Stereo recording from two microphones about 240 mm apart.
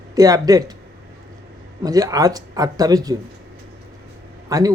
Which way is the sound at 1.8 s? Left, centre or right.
Centre.